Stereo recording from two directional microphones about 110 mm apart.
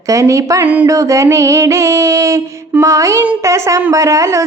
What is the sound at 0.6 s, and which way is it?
Speech, 15° right (ahead or behind).